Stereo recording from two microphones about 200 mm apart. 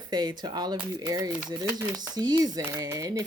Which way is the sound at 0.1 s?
20° right (ahead or behind).